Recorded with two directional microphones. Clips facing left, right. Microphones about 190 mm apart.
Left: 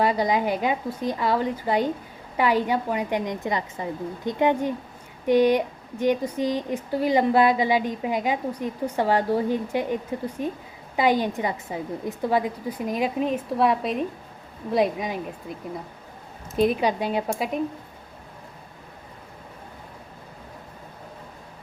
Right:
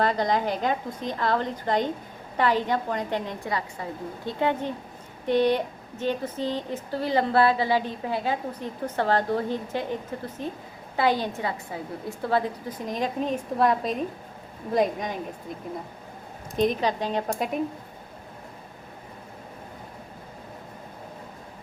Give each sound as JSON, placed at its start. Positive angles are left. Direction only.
{"t": 0.0, "sound": "speech", "side_deg": 10}
{"t": 16.6, "sound": "speech", "side_deg": 10}